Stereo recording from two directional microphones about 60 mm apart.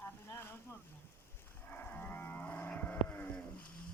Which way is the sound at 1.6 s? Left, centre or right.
Left.